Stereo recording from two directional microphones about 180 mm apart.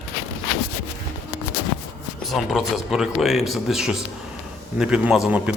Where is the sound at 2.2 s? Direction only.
Centre (ahead or behind).